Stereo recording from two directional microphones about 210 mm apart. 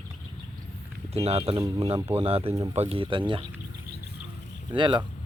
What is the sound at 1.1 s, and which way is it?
Speech, 30° right (ahead or behind).